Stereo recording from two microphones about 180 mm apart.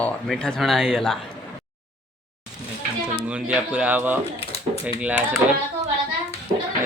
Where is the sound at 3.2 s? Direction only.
5° right (ahead or behind).